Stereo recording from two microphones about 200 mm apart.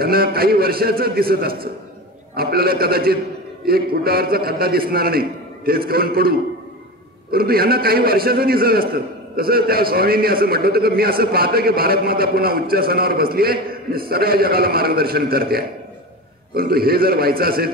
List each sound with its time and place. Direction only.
0.0 s a man's voice: 50° right (ahead or behind)